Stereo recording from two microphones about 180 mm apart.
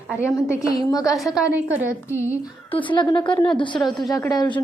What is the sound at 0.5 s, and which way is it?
Speech, 20° left (ahead or behind).